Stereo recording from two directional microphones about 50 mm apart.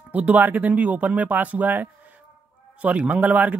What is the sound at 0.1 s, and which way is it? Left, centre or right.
Speech, right.